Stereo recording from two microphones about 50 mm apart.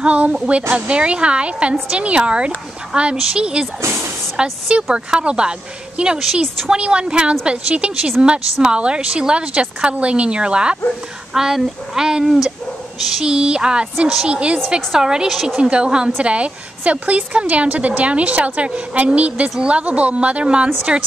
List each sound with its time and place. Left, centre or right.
0.0 s a woman's voice: right